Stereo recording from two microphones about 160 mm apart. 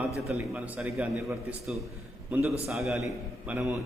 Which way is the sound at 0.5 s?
Centre (ahead or behind).